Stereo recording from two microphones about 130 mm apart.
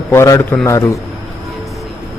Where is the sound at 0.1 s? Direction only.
20° left (ahead or behind).